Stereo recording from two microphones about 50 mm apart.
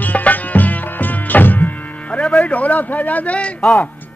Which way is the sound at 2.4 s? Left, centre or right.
Left.